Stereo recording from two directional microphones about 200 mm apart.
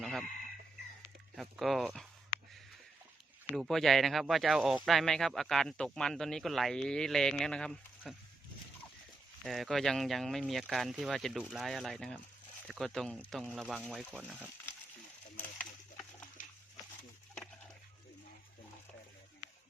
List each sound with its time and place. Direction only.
0.0 s chicken: centre (ahead or behind)
1.4 s speech: centre (ahead or behind)
3.5 s speech: centre (ahead or behind)
9.4 s speech: centre (ahead or behind)
16.4 s dog: 40° left (ahead or behind)